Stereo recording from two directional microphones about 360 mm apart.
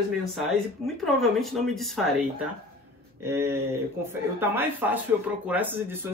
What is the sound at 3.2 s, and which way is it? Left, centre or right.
Speech, centre.